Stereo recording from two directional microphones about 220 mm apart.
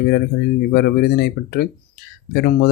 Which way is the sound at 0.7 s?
45° left (ahead or behind).